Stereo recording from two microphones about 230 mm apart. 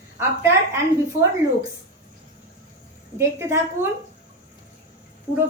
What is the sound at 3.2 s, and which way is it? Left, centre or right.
Speech, centre.